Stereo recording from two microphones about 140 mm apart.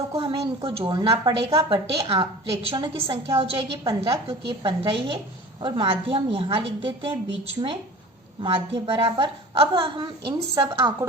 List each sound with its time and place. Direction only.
0.1 s a sound: 35° right (ahead or behind)
0.8 s a woman's voice: 25° right (ahead or behind)
8.4 s a woman's voice: 35° right (ahead or behind)